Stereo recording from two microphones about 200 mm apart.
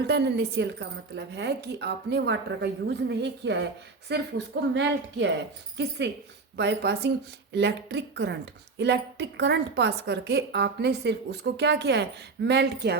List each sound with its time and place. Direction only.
0.1 s a woman's voice: 55° right (ahead or behind)